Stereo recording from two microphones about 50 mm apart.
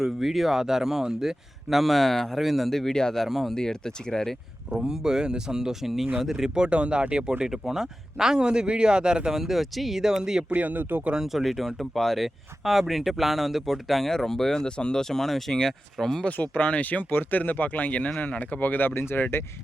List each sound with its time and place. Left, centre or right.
0.0 s speech: centre
3.2 s speech: centre
3.5 s speech: centre
4.9 s speech: centre
6.7 s speech: right
10.5 s speech: right
11.1 s speech: centre
16.2 s speech: left